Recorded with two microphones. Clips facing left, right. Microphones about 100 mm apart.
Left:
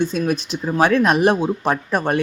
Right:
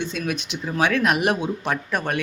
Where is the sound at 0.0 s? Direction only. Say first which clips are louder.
Left 7 dB; 40° left (ahead or behind).